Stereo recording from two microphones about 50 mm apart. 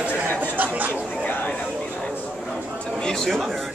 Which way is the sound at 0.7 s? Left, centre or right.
Right.